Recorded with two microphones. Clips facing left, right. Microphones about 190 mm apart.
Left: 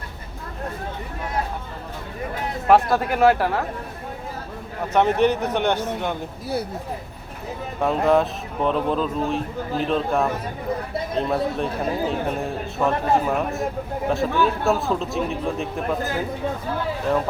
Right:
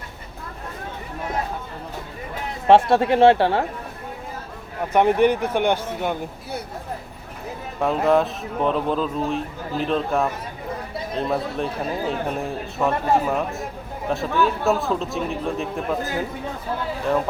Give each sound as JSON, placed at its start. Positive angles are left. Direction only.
{"t": 2.6, "sound": "speech", "side_deg": -30}
{"t": 4.9, "sound": "a man's voice", "side_deg": -10}
{"t": 7.8, "sound": "speech", "side_deg": 0}